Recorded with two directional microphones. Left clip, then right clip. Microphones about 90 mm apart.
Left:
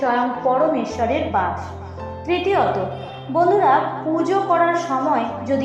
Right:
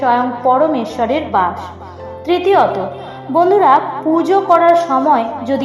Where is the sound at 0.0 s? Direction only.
20° right (ahead or behind).